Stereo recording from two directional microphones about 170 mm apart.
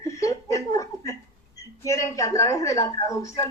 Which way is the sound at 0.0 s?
20° left (ahead or behind).